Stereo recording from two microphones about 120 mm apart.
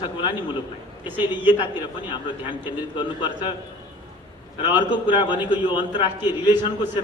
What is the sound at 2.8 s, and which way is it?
Speech, 40° left (ahead or behind).